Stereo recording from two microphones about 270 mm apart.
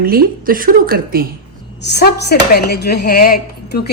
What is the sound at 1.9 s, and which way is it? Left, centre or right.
Speech, left.